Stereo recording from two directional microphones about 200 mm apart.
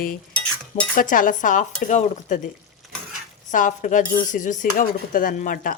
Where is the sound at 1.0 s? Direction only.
40° left (ahead or behind).